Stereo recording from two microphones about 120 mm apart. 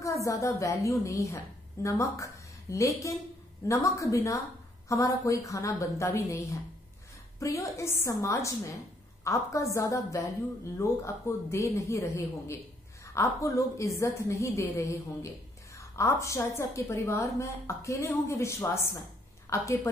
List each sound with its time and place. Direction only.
0.0 s a woman's voice: 25° left (ahead or behind)
16.0 s a woman's voice: 25° left (ahead or behind)